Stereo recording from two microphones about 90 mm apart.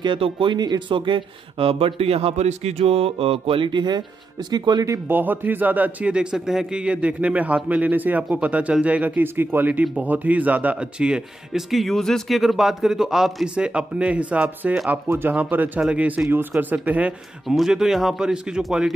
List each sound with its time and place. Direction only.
0.0 s speech: 65° right (ahead or behind); by 4.8 s 50° right (ahead or behind)
4.8 s speech: 30° right (ahead or behind)
5.1 s speech: 20° right (ahead or behind)
15.0 s speech: 20° right (ahead or behind)
17.6 s a man's voice: 5° right (ahead or behind)